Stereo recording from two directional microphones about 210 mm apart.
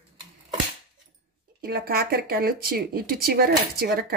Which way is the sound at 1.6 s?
45° right (ahead or behind).